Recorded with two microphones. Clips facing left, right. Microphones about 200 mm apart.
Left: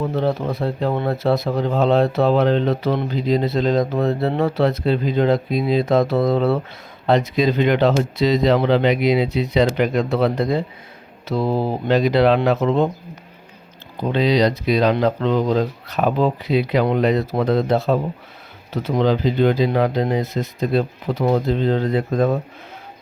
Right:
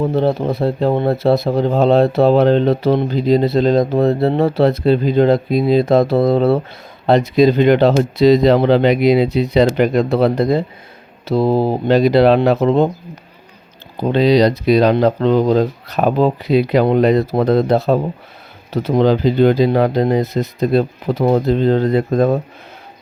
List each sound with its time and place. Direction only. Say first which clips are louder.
0.0 s speech: right 5 dB; 30° right (ahead or behind)
13.9 s speech: right 5 dB; 35° right (ahead or behind)